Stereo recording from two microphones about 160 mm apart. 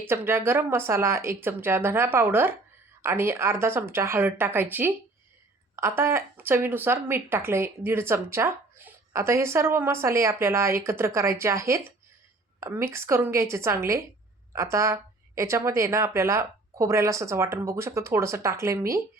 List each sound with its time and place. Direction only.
0.0 s speech: 15° right (ahead or behind)